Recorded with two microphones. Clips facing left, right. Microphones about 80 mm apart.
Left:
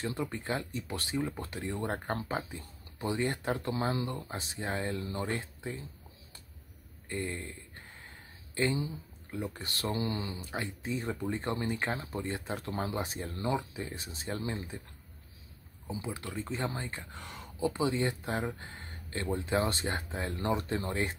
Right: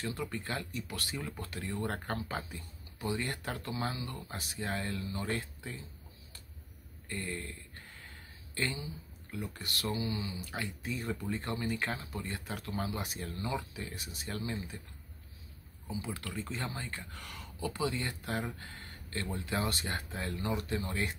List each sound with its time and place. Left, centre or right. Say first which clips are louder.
0.0 s speech: left 2 dB; left
7.1 s a sound: left 3 dB; left
8.5 s speech: left 6 dB; centre; by 10.3 s left
10.3 s speech: left 2 dB; left
15.9 s speech: left 2 dB; left